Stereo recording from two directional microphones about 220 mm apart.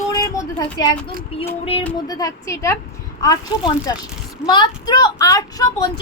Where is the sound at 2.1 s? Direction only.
15° left (ahead or behind).